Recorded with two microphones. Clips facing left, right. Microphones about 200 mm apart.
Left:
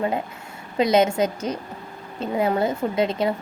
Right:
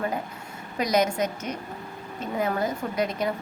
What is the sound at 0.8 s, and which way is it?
A woman's voice, 25° left (ahead or behind).